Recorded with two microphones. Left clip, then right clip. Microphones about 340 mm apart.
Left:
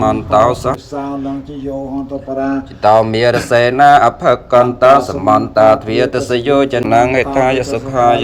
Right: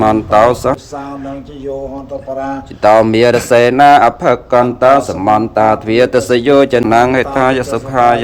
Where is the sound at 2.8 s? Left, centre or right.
Centre.